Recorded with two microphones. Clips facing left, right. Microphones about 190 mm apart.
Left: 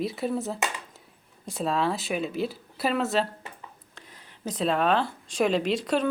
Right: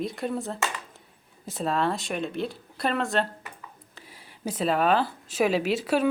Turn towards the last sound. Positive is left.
turn(degrees=-5)  # may be behind; listen again after turning